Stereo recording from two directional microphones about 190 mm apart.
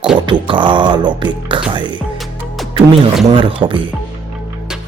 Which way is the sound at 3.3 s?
25° right (ahead or behind).